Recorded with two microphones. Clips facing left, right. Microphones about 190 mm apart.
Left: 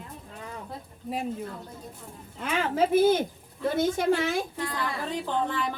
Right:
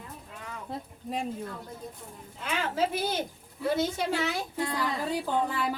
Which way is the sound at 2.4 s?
50° left (ahead or behind).